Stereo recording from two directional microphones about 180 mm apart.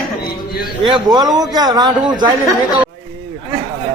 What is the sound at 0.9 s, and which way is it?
A man's voice, 25° right (ahead or behind).